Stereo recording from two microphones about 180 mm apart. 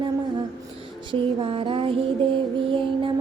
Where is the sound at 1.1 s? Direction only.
30° right (ahead or behind).